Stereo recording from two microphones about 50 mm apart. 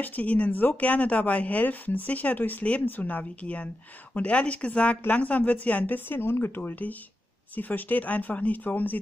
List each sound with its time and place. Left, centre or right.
0.0 s a woman's voice: left
5.9 s speech: left
6.6 s speech: left